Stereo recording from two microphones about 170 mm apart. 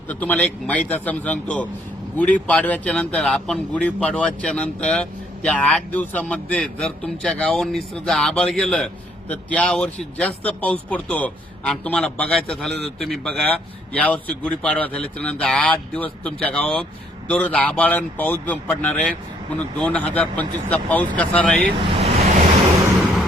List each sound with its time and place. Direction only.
0.1 s a man's voice: 10° left (ahead or behind)
21.8 s speech: 30° right (ahead or behind)